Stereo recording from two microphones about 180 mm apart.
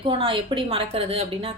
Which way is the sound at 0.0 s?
30° right (ahead or behind).